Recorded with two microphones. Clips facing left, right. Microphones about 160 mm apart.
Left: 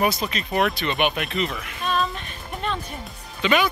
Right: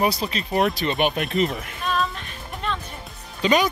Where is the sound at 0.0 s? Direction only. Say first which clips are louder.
Even; 30° right (ahead or behind).